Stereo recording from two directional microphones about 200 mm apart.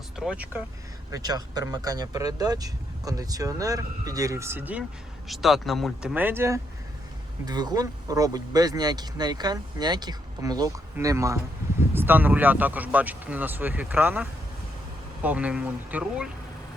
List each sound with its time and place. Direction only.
0.2 s speech: 5° right (ahead or behind)
1.1 s speech: 20° right (ahead or behind)